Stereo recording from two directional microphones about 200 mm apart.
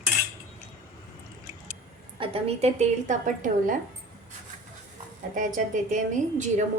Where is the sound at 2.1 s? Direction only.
25° right (ahead or behind).